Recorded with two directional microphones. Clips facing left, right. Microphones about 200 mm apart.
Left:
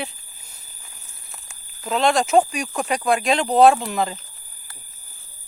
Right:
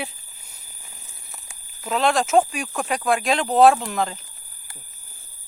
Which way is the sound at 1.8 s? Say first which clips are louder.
Left 1 dB; centre (ahead or behind).